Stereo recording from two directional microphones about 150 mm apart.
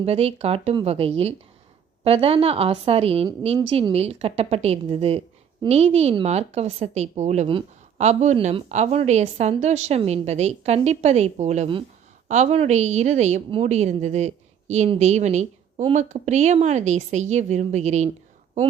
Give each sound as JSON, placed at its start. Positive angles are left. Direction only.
{"t": 0.0, "sound": "a woman's voice", "side_deg": -40}